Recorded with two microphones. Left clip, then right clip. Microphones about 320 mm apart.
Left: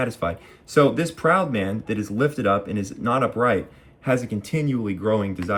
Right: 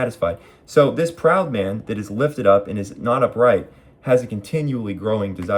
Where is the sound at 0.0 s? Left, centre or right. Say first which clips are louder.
Right 4 dB; centre.